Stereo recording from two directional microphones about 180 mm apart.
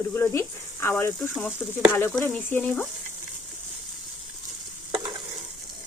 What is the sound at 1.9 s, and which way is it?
Speech, 10° left (ahead or behind).